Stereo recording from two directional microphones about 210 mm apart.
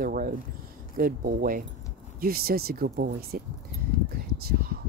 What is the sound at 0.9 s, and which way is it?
Speech, 45° right (ahead or behind).